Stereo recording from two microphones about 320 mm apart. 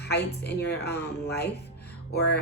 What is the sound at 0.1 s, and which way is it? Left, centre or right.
A woman's voice, left.